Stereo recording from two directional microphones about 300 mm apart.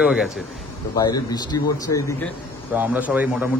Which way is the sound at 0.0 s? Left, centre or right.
Centre.